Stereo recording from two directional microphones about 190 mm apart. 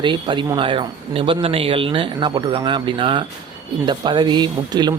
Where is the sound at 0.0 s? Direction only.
25° right (ahead or behind).